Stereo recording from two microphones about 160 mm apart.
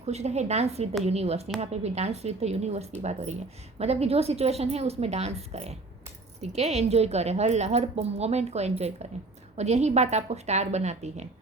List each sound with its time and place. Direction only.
0.0 s a woman's voice: 45° right (ahead or behind)